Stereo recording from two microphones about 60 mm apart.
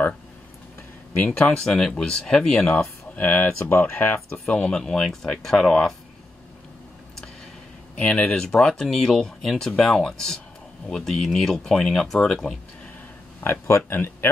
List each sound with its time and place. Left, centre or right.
1.1 s speech: left
1.6 s speech: centre
2.7 s speech: left
4.3 s speech: centre
7.9 s speech: left
13.4 s speech: left